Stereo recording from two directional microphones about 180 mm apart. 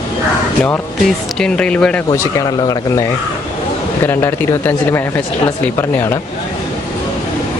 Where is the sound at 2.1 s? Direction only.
20° left (ahead or behind).